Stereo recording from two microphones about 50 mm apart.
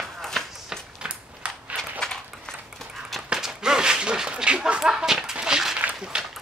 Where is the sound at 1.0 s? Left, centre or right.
Right.